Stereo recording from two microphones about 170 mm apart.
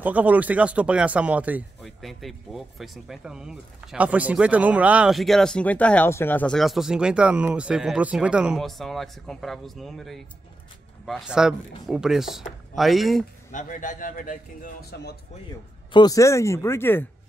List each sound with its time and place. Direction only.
0.0 s speech: 10° right (ahead or behind)
13.5 s a man's voice: 50° left (ahead or behind); by 15.1 s 70° left (ahead or behind)
15.9 s speech: 25° left (ahead or behind)